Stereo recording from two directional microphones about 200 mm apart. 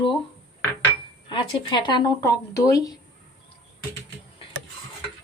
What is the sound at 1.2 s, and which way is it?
Speech, 25° left (ahead or behind).